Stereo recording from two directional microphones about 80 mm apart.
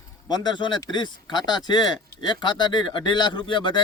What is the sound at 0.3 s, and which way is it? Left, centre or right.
A man's voice, left.